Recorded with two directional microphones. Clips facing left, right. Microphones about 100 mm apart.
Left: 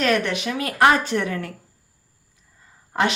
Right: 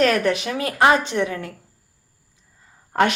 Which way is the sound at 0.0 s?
40° right (ahead or behind).